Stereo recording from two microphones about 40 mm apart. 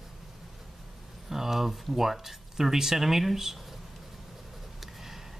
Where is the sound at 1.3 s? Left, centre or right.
Centre.